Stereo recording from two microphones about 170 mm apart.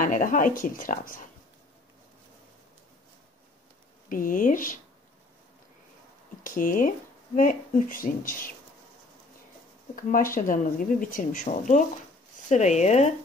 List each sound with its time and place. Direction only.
0.0 s speech: 50° left (ahead or behind)
4.1 s speech: 50° left (ahead or behind)
6.4 s speech: 55° left (ahead or behind)
9.9 s speech: 55° left (ahead or behind)